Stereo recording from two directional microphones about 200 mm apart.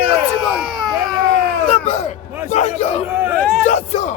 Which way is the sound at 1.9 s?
35° left (ahead or behind).